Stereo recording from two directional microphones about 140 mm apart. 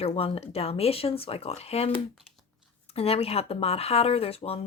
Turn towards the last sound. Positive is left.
turn(degrees=45)  # may be behind; listen again after turning